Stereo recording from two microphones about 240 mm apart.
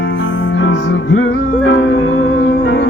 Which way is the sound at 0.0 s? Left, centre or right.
Left.